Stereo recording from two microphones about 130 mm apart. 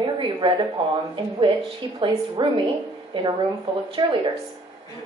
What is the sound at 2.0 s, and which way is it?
A woman's voice, 35° right (ahead or behind).